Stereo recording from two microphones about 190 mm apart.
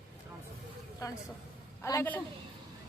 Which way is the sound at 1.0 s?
15° left (ahead or behind).